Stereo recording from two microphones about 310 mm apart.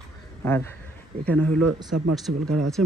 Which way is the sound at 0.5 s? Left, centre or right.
Centre.